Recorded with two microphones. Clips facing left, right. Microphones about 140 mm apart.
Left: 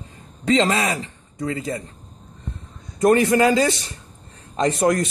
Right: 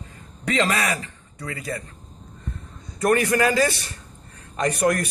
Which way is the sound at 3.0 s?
25° left (ahead or behind).